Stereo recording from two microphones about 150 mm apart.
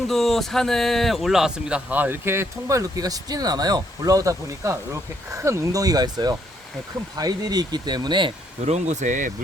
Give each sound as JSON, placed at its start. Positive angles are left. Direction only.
{"t": 0.1, "sound": "speech", "side_deg": 0}
{"t": 8.6, "sound": "speech", "side_deg": -50}